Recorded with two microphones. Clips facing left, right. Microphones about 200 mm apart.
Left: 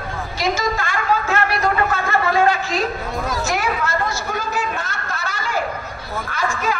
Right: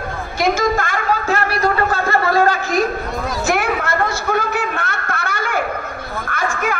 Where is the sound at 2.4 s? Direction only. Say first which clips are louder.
Right 2 dB; 50° right (ahead or behind).